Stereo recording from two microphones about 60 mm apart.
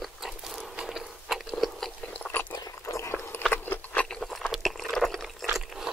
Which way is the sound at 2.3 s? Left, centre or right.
Left.